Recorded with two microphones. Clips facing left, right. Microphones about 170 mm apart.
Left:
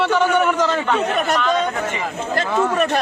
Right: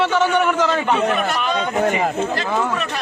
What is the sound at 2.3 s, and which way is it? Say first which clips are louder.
Speech: left 3 dB; 50° left (ahead or behind).